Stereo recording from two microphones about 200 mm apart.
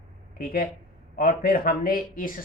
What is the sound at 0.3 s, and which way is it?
Speech, 50° left (ahead or behind).